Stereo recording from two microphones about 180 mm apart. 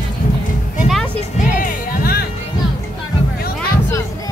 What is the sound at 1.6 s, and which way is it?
Music, 50° left (ahead or behind).